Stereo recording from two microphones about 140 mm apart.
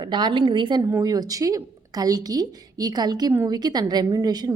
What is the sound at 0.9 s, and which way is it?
A woman's voice, 25° right (ahead or behind).